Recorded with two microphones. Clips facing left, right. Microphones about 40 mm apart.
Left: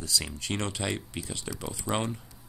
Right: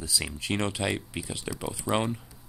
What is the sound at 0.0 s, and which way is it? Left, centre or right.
Speech, centre.